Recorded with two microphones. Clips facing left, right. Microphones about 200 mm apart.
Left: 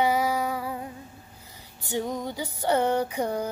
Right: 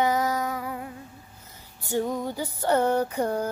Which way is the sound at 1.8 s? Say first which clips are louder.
Right 3 dB; 15° left (ahead or behind).